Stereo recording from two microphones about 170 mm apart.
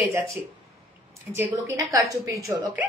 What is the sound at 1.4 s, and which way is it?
A woman's voice, 20° right (ahead or behind).